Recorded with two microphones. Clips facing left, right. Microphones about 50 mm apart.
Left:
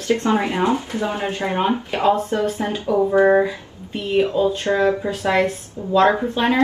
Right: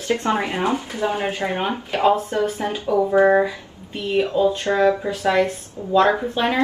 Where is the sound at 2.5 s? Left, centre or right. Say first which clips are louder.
Even; left.